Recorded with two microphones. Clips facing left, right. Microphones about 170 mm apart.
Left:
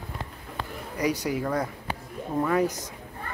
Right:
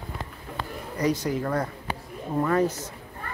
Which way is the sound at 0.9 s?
10° left (ahead or behind).